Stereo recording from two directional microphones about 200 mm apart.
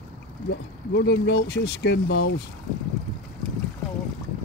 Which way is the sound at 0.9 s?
60° left (ahead or behind).